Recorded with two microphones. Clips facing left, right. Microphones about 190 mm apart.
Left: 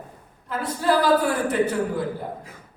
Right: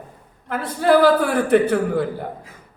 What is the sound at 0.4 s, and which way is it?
A woman's voice, 60° right (ahead or behind).